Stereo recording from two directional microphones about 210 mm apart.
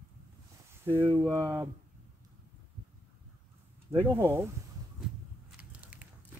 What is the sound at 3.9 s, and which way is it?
Speech, 10° right (ahead or behind).